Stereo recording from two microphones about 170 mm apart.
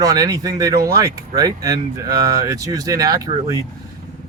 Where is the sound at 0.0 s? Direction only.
20° right (ahead or behind).